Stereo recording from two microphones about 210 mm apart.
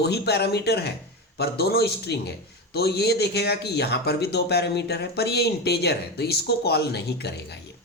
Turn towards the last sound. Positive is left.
turn(degrees=50)  # may be behind; listen again after turning